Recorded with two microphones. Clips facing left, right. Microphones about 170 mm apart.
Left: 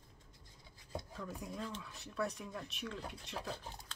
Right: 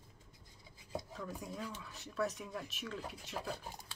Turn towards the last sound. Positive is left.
turn(degrees=-10)  # may be behind; listen again after turning